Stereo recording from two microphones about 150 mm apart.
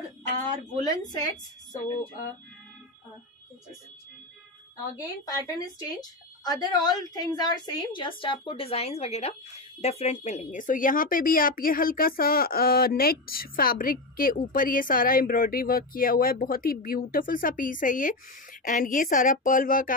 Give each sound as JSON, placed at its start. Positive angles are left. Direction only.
{"t": 1.1, "sound": "speech", "side_deg": 25}
{"t": 4.9, "sound": "a woman's voice", "side_deg": 25}